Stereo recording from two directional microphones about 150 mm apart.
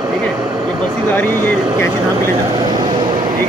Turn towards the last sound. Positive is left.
turn(degrees=-30)  # may be behind; listen again after turning